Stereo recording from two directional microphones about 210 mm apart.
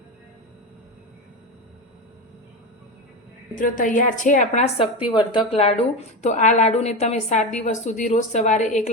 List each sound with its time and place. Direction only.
3.5 s a woman's voice: 40° left (ahead or behind)
5.1 s a woman's voice: 20° left (ahead or behind)